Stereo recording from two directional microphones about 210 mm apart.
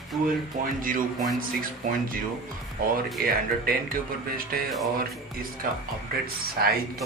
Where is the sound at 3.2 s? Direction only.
45° right (ahead or behind).